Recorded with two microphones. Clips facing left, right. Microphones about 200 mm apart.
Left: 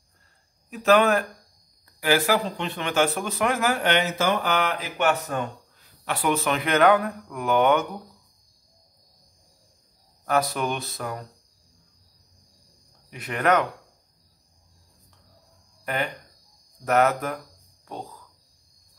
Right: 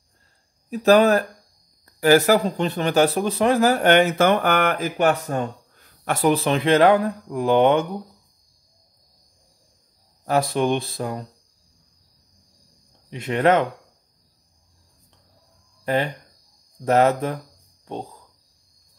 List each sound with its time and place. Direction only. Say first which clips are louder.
0.7 s speech: right 4 dB; 35° right (ahead or behind)
5.8 s speech: right 6 dB; 45° right (ahead or behind); by 8.0 s 30° right (ahead or behind)
10.2 s speech: right 4 dB; 30° right (ahead or behind)
13.1 s speech: right 4 dB; 25° right (ahead or behind)
15.8 s speech: right 6 dB; 30° right (ahead or behind)